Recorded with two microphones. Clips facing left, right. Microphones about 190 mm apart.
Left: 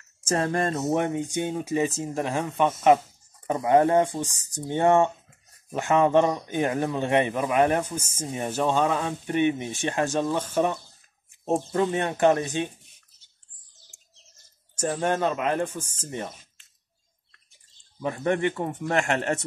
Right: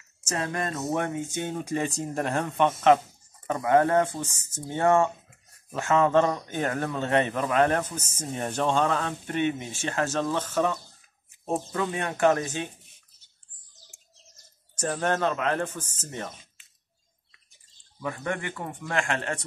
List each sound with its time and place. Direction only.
0.3 s speech: 35° left (ahead or behind); by 10.7 s 15° left (ahead or behind)
11.7 s a man's voice: 25° left (ahead or behind)
14.8 s speech: 10° left (ahead or behind)
18.0 s a man's voice: 25° left (ahead or behind)